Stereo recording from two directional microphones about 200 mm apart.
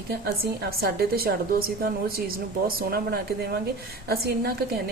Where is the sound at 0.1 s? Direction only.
50° right (ahead or behind).